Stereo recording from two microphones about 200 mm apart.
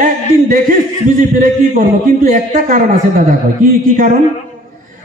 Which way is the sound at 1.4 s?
40° right (ahead or behind).